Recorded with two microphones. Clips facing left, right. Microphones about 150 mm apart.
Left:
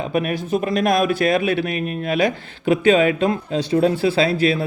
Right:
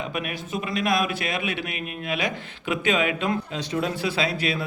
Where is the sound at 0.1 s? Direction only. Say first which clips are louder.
Left 9 dB; 40° left (ahead or behind).